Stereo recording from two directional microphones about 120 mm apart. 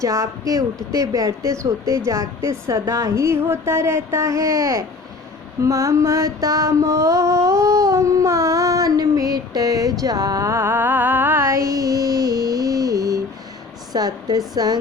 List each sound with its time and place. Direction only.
0.0 s a woman's voice: 25° right (ahead or behind)
5.6 s a sound: 25° right (ahead or behind)
13.9 s speech: 35° right (ahead or behind)